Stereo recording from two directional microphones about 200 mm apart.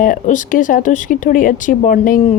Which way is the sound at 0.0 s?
40° left (ahead or behind).